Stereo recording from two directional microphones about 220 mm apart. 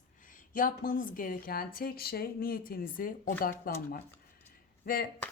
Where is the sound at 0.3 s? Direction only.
40° left (ahead or behind).